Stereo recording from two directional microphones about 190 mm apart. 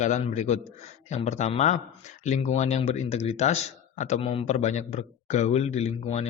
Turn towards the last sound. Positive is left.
turn(degrees=35)  # may be behind; listen again after turning